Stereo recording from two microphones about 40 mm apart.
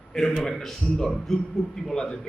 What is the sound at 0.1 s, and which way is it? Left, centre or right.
Speech, centre.